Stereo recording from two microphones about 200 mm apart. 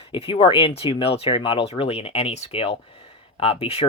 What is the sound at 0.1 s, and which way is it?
Speech, 25° left (ahead or behind).